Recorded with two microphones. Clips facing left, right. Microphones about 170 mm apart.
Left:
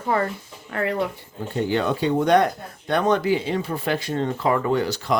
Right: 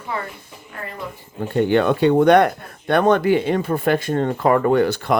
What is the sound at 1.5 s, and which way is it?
Speech, 60° right (ahead or behind).